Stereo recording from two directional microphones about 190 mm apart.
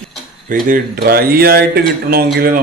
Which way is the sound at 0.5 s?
50° right (ahead or behind).